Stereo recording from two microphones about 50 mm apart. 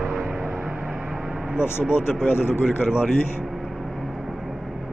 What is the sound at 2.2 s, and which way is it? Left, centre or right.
A man's voice, left.